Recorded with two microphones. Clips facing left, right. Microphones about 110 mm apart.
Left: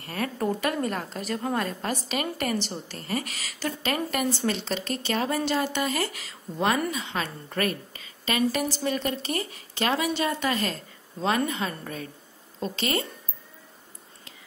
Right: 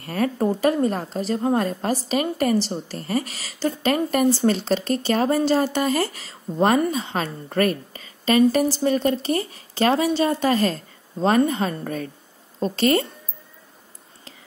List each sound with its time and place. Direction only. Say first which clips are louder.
0.0 s a woman's voice: right 6 dB; 40° right (ahead or behind)